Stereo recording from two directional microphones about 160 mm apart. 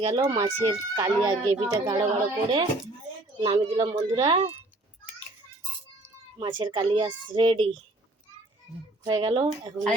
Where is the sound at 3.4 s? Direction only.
25° right (ahead or behind).